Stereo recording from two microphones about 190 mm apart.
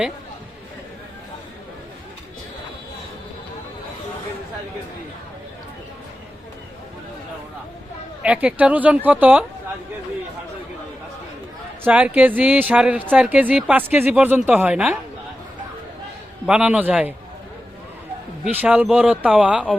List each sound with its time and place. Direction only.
8.2 s speech: 5° right (ahead or behind)
11.8 s speech: 10° right (ahead or behind)
16.5 s a man's voice: 5° right (ahead or behind)
18.4 s speech: 5° right (ahead or behind)